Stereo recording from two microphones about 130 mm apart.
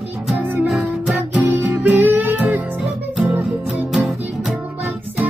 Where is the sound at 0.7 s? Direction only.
Centre (ahead or behind).